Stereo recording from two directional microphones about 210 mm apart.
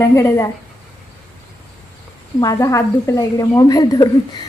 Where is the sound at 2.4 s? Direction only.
15° left (ahead or behind).